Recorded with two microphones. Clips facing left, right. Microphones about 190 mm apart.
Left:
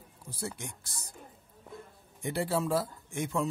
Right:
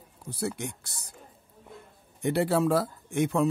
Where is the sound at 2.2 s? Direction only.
65° right (ahead or behind).